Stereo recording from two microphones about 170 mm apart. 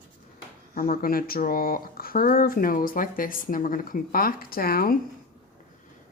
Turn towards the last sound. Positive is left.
turn(degrees=60)  # may be behind; listen again after turning